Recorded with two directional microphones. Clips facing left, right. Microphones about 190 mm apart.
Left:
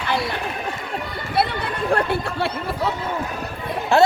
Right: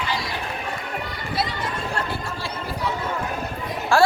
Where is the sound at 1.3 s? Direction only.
60° left (ahead or behind).